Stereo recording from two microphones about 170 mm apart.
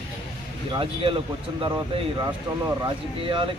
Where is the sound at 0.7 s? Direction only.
30° right (ahead or behind).